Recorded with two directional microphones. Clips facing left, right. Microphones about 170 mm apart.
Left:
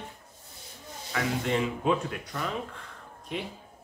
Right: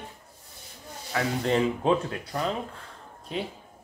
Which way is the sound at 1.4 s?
30° right (ahead or behind).